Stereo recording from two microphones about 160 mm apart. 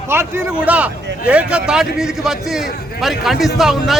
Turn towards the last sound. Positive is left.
turn(degrees=0)  # may be behind; listen again after turning